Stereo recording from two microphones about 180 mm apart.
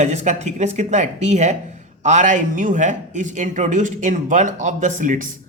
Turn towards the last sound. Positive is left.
turn(degrees=-45)  # may be behind; listen again after turning